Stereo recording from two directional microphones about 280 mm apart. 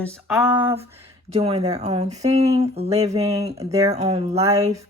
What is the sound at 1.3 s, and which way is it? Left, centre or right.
Speech, right.